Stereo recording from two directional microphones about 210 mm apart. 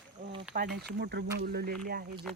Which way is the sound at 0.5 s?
50° right (ahead or behind).